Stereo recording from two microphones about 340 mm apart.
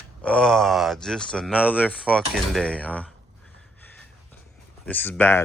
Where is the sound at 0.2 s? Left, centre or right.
Centre.